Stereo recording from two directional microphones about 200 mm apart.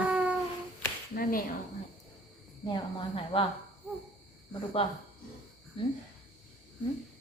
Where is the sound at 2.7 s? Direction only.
25° left (ahead or behind).